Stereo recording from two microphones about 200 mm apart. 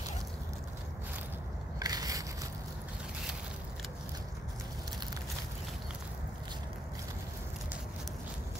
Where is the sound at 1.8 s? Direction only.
20° right (ahead or behind).